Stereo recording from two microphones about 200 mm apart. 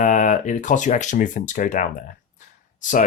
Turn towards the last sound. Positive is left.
turn(degrees=40)  # may be behind; listen again after turning